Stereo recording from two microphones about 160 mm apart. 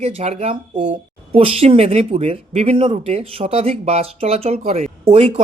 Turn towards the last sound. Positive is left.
turn(degrees=-40)  # may be behind; listen again after turning